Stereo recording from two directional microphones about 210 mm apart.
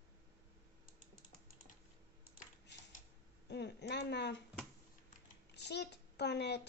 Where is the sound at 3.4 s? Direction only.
55° left (ahead or behind).